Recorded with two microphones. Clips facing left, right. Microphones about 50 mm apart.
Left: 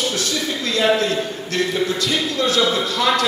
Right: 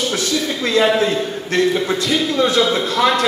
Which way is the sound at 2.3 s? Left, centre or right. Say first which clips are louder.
Right 5 dB; right.